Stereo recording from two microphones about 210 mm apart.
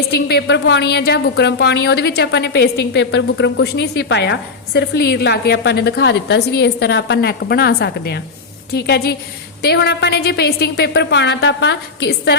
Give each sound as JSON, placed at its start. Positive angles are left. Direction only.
{"t": 0.1, "sound": "a woman's voice", "side_deg": 50}